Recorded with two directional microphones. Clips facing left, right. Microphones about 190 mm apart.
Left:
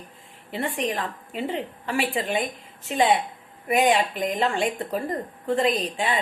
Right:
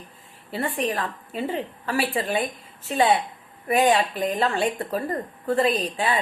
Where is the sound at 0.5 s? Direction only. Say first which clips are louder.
Right 1 dB; 15° left (ahead or behind).